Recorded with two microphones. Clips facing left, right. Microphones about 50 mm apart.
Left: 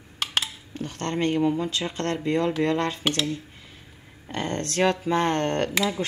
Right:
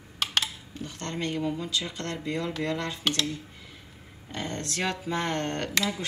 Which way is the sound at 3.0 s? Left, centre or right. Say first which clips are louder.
Left 3 dB; centre.